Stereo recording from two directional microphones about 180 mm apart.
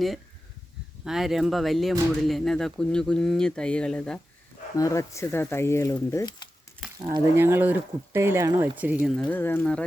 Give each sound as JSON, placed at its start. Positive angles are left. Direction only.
{"t": 1.0, "sound": "speech", "side_deg": 0}
{"t": 4.8, "sound": "speech", "side_deg": 15}
{"t": 7.3, "sound": "speech", "side_deg": -15}
{"t": 9.1, "sound": "speech", "side_deg": 10}